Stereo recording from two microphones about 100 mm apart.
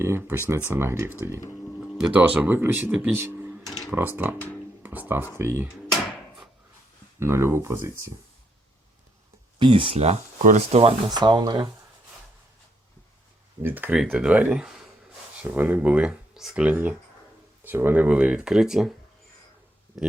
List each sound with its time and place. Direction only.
0.0 s speech: 25° right (ahead or behind)
2.0 s speech: 10° right (ahead or behind)
7.2 s speech: 25° right (ahead or behind)
9.6 s speech: 55° right (ahead or behind); by 10.9 s 85° right
11.1 s speech: 45° right (ahead or behind)
13.6 s speech: 20° right (ahead or behind)
13.9 s speech: 5° right (ahead or behind)
16.6 s speech: 15° right (ahead or behind)
19.9 s speech: 5° right (ahead or behind)